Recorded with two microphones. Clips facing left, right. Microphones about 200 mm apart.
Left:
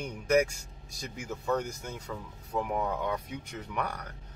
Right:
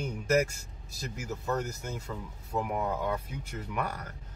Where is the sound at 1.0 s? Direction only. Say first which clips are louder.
Even; 5° right (ahead or behind).